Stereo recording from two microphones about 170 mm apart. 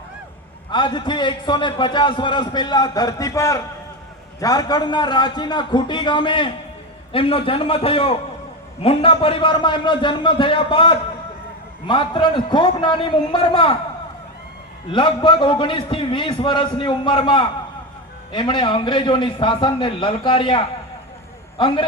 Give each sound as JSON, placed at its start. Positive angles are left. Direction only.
{"t": 0.7, "sound": "a man's voice", "side_deg": 25}
{"t": 14.8, "sound": "a man's voice", "side_deg": 30}